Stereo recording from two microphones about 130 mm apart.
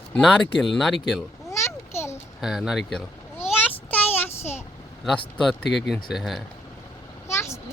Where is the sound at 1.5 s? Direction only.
20° left (ahead or behind).